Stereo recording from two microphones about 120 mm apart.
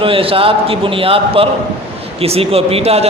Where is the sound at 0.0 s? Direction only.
50° right (ahead or behind).